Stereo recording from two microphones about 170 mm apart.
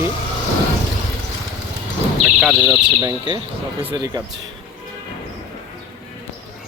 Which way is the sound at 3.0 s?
25° right (ahead or behind).